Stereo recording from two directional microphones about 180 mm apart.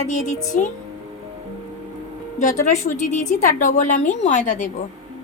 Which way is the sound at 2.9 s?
45° left (ahead or behind).